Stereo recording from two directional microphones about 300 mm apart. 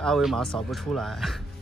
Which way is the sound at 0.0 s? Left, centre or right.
Centre.